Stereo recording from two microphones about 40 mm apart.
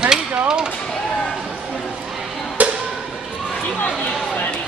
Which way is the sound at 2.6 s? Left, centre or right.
Right.